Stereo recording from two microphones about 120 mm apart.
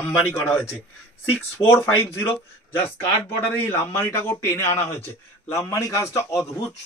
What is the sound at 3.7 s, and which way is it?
A man's voice, 20° left (ahead or behind).